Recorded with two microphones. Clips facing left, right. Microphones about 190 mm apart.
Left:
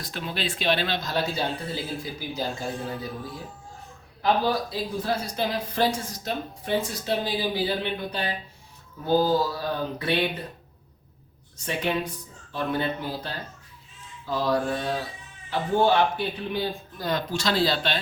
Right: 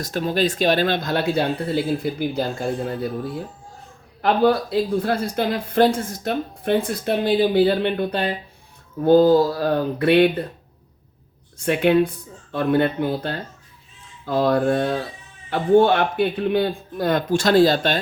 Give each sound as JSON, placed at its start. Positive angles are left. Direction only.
{"t": 0.0, "sound": "speech", "side_deg": -45}
{"t": 4.2, "sound": "speech", "side_deg": -60}
{"t": 11.6, "sound": "speech", "side_deg": -60}